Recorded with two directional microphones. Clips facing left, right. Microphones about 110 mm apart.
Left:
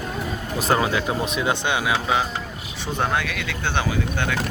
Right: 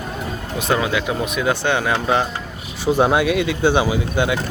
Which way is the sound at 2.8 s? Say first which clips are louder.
Right 8 dB; 10° right (ahead or behind).